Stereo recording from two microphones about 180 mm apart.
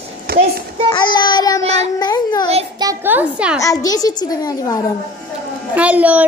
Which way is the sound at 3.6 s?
20° left (ahead or behind).